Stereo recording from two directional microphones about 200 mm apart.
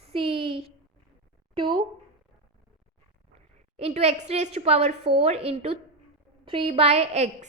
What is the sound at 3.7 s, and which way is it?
A woman's voice, 30° right (ahead or behind).